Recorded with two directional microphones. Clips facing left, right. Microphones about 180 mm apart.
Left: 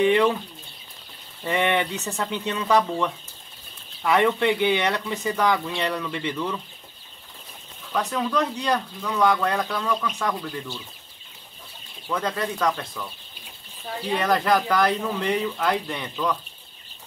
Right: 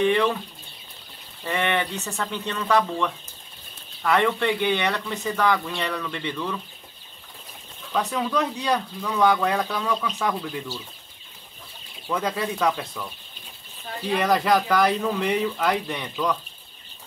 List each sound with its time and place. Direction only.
0.0 s speech: 10° left (ahead or behind)
1.4 s speech: 5° left (ahead or behind)
4.0 s speech: 5° left (ahead or behind)
5.8 s speech: 15° left (ahead or behind)
6.1 s speech: 5° left (ahead or behind)
7.9 s speech: 5° right (ahead or behind)
12.1 s speech: 10° right (ahead or behind)
14.1 s speech: 10° right (ahead or behind)